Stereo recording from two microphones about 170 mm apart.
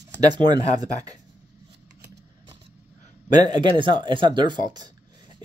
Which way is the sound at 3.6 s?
30° right (ahead or behind).